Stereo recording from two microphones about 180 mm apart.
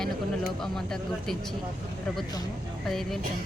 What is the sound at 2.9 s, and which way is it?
Speech, centre (ahead or behind).